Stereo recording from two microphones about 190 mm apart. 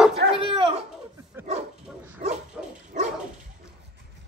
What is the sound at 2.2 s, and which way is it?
Dog, 40° right (ahead or behind).